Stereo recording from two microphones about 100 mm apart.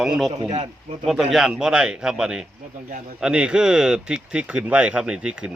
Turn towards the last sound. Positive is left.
turn(degrees=-10)  # may be behind; listen again after turning